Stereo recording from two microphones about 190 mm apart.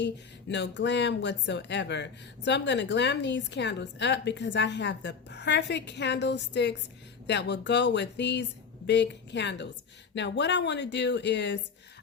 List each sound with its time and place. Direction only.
0.0 s speech: 70° left (ahead or behind)